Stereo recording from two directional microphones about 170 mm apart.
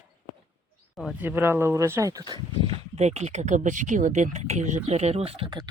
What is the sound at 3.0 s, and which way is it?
Speech, 40° right (ahead or behind).